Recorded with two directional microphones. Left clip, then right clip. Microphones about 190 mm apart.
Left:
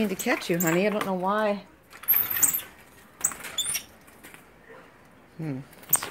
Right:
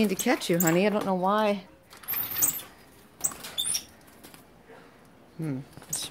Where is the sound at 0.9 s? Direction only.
30° right (ahead or behind).